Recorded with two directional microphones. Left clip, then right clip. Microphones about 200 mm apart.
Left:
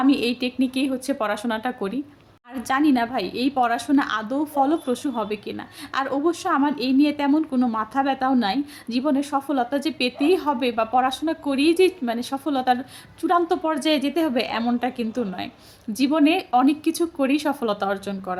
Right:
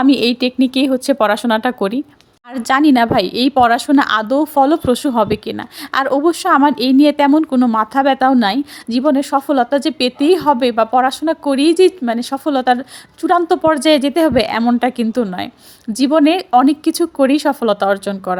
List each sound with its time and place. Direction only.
0.0 s a woman's voice: 45° right (ahead or behind)